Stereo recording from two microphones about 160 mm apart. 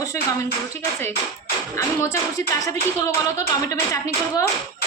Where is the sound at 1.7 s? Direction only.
20° left (ahead or behind).